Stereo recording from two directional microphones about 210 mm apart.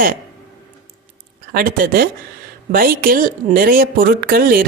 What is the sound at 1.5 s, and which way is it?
Speech, 45° right (ahead or behind).